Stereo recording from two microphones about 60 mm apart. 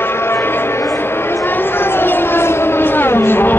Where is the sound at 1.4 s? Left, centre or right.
Left.